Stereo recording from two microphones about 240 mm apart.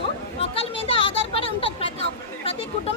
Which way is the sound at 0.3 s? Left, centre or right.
Left.